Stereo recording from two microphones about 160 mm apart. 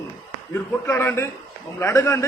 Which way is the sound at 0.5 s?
15° left (ahead or behind).